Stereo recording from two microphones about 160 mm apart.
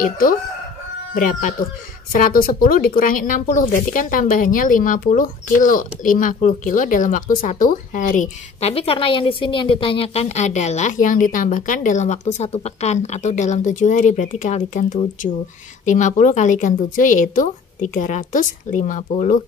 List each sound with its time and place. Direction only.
0.0 s speech: 65° left (ahead or behind)
2.1 s speech: 60° left (ahead or behind)